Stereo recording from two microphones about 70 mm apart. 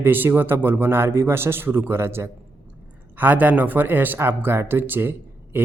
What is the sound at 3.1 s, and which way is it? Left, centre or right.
Speech, right.